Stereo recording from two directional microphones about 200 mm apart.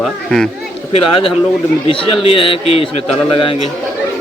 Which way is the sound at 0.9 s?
25° left (ahead or behind).